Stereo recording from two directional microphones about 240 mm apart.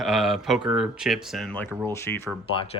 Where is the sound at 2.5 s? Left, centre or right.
Left.